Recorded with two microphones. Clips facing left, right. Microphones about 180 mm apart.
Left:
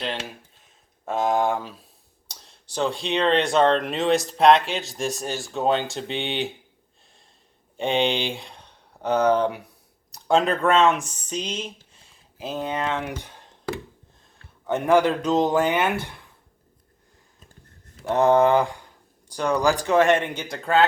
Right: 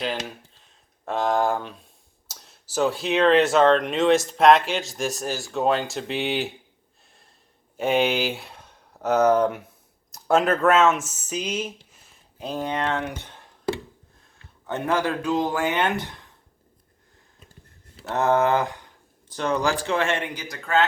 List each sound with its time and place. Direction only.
1.0 s speech: centre (ahead or behind)
7.8 s speech: 5° right (ahead or behind)
12.4 s speech: 5° left (ahead or behind)
14.7 s a man's voice: 15° left (ahead or behind)
15.7 s speech: 10° left (ahead or behind)
18.1 s a man's voice: 15° left (ahead or behind); by 20.8 s 30° left (ahead or behind)